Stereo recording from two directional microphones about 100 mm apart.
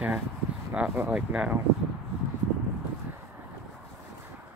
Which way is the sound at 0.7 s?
10° right (ahead or behind).